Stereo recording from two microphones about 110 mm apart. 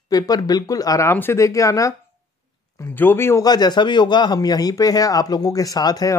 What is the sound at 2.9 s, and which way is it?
Speech, 20° left (ahead or behind).